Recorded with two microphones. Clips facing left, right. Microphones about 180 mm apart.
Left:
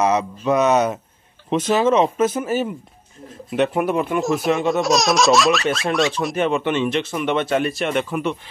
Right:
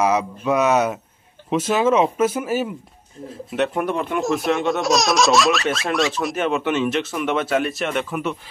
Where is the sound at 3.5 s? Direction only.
Centre (ahead or behind).